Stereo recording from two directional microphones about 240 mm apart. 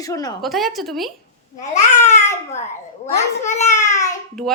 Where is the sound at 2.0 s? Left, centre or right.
Left.